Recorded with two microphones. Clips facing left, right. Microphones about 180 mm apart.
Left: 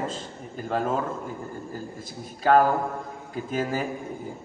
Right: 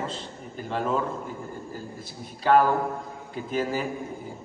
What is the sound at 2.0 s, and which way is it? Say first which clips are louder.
A man's voice: left 4 dB; 45° left (ahead or behind).